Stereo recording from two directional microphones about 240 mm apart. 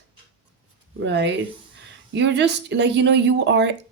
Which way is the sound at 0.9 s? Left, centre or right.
Right.